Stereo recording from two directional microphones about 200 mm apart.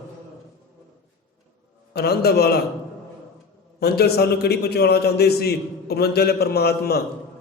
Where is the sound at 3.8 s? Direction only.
50° left (ahead or behind).